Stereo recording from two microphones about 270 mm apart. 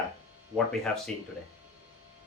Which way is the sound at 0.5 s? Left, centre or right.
Centre.